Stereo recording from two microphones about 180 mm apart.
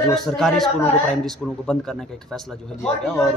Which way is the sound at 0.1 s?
Centre (ahead or behind).